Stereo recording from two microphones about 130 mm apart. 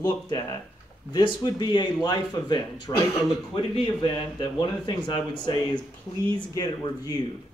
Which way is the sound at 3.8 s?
40° left (ahead or behind).